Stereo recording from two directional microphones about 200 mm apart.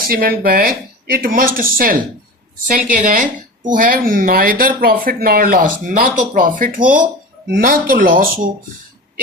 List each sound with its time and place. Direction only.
0.1 s speech: 50° right (ahead or behind)